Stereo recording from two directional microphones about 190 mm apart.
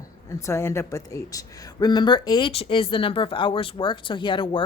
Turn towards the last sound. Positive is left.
turn(degrees=25)  # may be behind; listen again after turning